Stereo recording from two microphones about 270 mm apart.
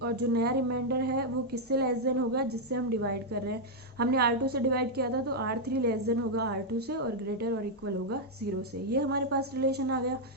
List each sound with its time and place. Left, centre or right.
0.0 s a woman's voice: right
8.9 s a woman's voice: right